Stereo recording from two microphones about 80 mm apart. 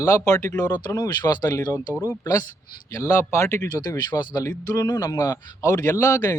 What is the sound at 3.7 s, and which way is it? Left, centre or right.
Speech, left.